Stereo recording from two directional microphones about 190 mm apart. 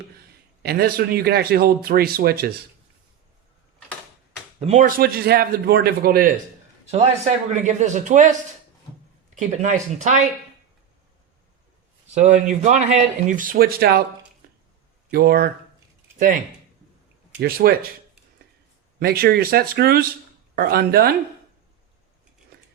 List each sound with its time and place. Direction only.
0.6 s speech: 55° right (ahead or behind)
4.6 s a man's voice: 40° right (ahead or behind)
7.5 s speech: 40° right (ahead or behind)
12.1 s a man's voice: 40° right (ahead or behind); by 14.0 s 55° right (ahead or behind)
15.1 s speech: 55° right (ahead or behind)
16.1 s speech: 45° right (ahead or behind)
17.4 s speech: 55° right (ahead or behind)
18.9 s a man's voice: 55° right (ahead or behind)